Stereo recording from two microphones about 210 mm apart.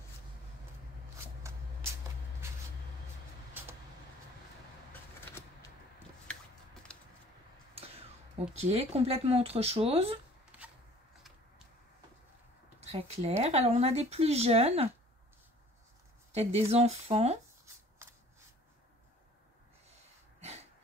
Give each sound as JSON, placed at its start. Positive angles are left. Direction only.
{"t": 1.1, "sound": "shuffling cards", "side_deg": -10}
{"t": 8.5, "sound": "speech", "side_deg": -30}
{"t": 10.5, "sound": "a sound", "side_deg": -5}
{"t": 12.8, "sound": "speech", "side_deg": -30}
{"t": 16.3, "sound": "speech", "side_deg": -30}
{"t": 20.3, "sound": "a sound", "side_deg": -30}